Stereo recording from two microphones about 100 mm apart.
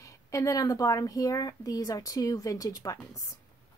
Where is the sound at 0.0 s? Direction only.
35° left (ahead or behind).